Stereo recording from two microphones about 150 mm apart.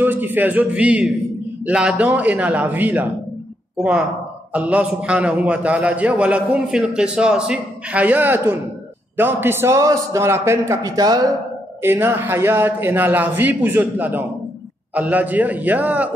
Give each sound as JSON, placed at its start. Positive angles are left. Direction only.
{"t": 0.0, "sound": "a man's voice", "side_deg": -15}
{"t": 4.5, "sound": "a man's voice", "side_deg": -10}
{"t": 11.8, "sound": "a man's voice", "side_deg": -15}